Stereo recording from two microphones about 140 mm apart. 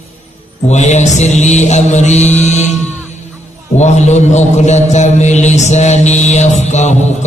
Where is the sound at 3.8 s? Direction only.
55° left (ahead or behind).